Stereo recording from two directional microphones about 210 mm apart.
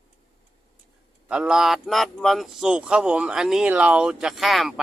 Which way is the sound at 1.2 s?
5° right (ahead or behind).